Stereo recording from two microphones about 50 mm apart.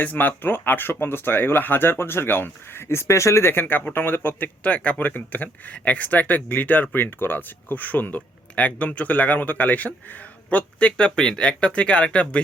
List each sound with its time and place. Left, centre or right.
0.0 s speech: left
3.5 s speech: left
4.6 s speech: left
6.9 s speech: left